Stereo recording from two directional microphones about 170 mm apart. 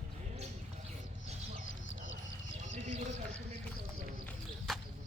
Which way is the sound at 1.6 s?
90° left.